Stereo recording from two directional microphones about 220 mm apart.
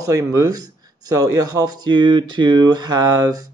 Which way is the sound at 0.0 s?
15° right (ahead or behind).